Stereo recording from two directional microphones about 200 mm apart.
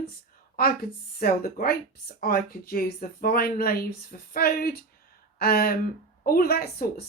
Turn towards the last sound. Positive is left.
turn(degrees=50)  # may be behind; listen again after turning